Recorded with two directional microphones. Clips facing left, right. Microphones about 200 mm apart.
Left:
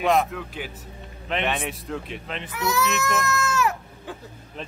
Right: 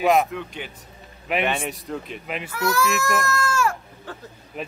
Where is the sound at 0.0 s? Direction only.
Centre (ahead or behind).